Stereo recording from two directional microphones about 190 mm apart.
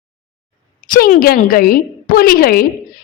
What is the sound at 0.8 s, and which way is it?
A woman's voice, 45° left (ahead or behind).